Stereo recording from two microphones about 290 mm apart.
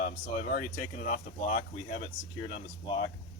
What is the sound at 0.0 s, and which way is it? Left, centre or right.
Speech, left.